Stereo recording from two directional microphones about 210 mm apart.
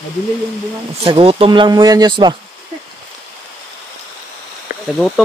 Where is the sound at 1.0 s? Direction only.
25° right (ahead or behind).